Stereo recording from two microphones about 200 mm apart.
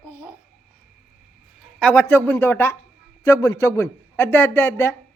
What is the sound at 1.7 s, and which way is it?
A man's voice, 5° left (ahead or behind).